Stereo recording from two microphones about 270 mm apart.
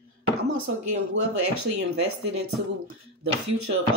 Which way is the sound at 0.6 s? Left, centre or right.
Right.